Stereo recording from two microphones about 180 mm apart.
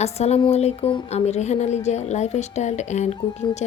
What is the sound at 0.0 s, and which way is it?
Speech, 35° left (ahead or behind).